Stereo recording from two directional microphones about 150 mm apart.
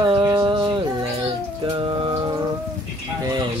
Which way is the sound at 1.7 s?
35° right (ahead or behind).